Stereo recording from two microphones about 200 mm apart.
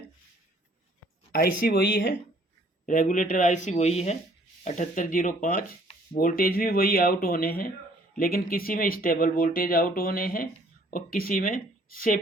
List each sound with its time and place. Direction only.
1.3 s speech: 50° left (ahead or behind)
2.8 s speech: 40° left (ahead or behind)